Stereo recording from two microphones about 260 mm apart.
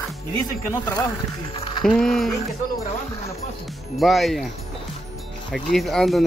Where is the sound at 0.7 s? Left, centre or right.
Centre.